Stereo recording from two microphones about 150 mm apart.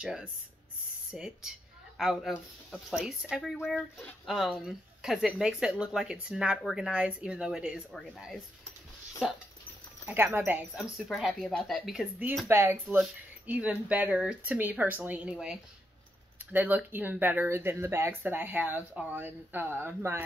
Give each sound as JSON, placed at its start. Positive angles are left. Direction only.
{"t": 0.0, "sound": "speech", "side_deg": -5}
{"t": 10.0, "sound": "speech", "side_deg": -15}
{"t": 10.8, "sound": "speech", "side_deg": 0}
{"t": 12.4, "sound": "speech", "side_deg": -15}